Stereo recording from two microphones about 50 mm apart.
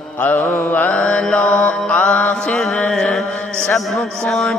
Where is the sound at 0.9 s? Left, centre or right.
Left.